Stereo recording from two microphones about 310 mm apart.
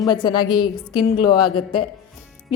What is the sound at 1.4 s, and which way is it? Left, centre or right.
Speech, left.